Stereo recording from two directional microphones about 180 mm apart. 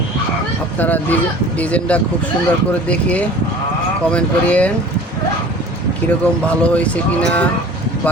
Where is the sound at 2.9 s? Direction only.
5° left (ahead or behind).